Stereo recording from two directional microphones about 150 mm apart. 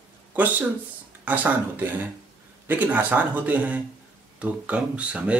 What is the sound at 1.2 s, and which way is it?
Speech, 10° right (ahead or behind).